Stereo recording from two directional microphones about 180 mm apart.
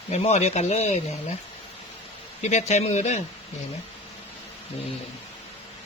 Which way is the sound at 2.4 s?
40° left (ahead or behind).